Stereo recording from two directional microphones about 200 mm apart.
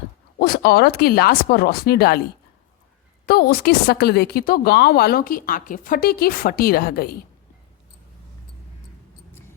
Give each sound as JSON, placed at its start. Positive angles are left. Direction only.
{"t": 0.3, "sound": "a woman's voice", "side_deg": 50}
{"t": 3.2, "sound": "a woman's voice", "side_deg": 50}